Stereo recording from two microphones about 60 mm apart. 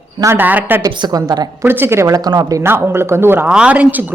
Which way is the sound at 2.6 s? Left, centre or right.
Right.